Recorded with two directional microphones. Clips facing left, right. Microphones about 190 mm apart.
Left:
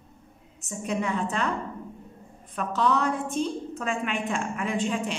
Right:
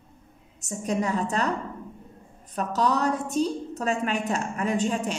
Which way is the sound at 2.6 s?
40° right (ahead or behind).